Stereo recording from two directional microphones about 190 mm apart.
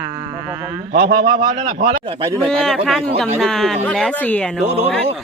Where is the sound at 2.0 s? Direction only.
25° right (ahead or behind).